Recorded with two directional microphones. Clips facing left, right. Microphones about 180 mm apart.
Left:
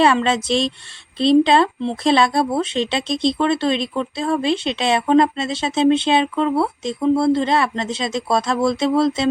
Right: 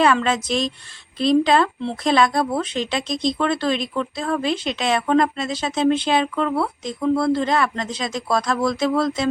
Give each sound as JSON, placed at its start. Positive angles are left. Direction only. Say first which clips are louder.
{"t": 0.0, "sound": "speech", "louder": "left 2 dB", "side_deg": 30}